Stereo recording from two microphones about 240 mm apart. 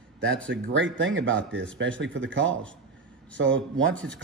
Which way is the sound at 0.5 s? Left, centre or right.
Right.